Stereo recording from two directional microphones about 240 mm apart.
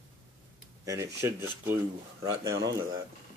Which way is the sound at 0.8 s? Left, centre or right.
Centre.